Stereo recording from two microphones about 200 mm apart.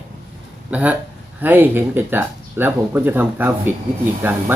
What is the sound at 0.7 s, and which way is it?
Speech, 5° right (ahead or behind).